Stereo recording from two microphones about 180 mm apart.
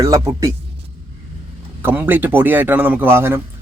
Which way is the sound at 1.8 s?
10° right (ahead or behind).